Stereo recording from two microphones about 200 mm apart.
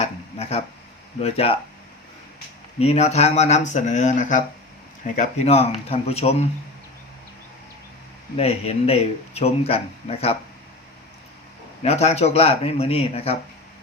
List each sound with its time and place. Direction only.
0.0 s a sound: 30° left (ahead or behind)
1.2 s speech: 30° left (ahead or behind)
2.7 s speech: 30° left (ahead or behind)
8.4 s speech: 30° left (ahead or behind)
11.8 s speech: 30° left (ahead or behind)